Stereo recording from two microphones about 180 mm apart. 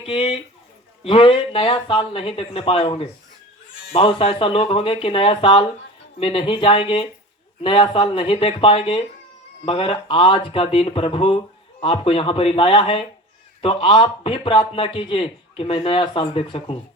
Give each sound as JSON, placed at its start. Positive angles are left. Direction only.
{"t": 0.0, "sound": "speech", "side_deg": 30}